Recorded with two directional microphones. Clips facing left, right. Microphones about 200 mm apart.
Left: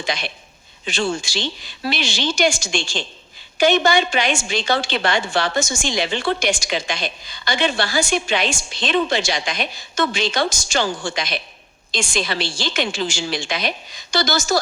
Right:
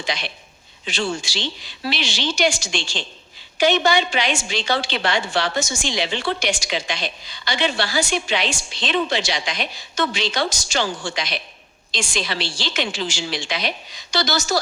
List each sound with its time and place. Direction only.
0.0 s a man's voice: 50° left (ahead or behind)